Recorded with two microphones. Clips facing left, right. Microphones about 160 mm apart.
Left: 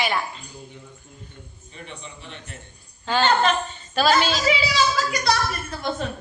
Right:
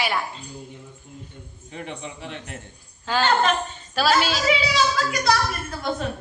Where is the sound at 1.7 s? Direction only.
80° right.